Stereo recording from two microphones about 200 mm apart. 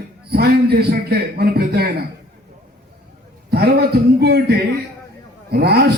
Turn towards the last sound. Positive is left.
turn(degrees=-55)  # may be behind; listen again after turning